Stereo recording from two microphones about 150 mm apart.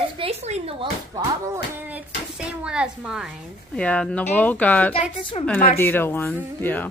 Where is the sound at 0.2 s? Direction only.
45° right (ahead or behind).